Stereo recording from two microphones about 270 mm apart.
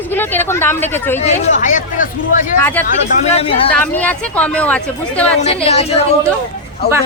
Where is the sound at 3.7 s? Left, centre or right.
Centre.